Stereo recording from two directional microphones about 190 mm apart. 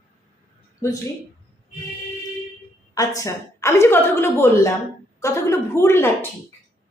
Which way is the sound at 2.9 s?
20° left (ahead or behind).